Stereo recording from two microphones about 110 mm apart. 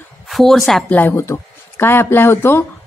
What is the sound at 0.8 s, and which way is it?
A woman's voice, 15° left (ahead or behind).